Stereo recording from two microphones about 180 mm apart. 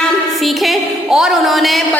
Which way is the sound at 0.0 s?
Centre (ahead or behind).